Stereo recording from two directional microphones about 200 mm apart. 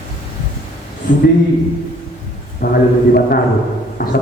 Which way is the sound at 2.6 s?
50° left (ahead or behind).